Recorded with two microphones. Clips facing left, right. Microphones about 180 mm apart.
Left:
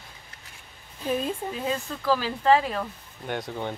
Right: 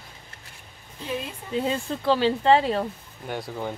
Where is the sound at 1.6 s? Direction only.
25° right (ahead or behind).